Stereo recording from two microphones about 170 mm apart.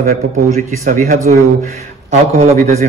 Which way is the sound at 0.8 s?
45° right (ahead or behind).